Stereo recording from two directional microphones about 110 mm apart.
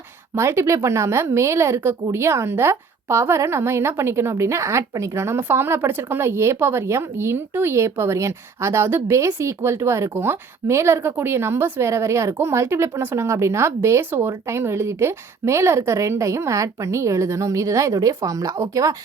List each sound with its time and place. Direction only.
0.3 s a woman's voice: 25° right (ahead or behind)